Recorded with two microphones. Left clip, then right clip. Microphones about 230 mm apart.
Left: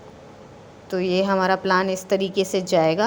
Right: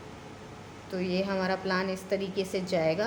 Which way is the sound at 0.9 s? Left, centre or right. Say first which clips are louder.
Left 10 dB; left.